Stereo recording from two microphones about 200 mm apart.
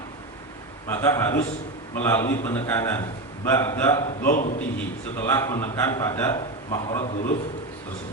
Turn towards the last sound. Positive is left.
turn(degrees=35)  # may be behind; listen again after turning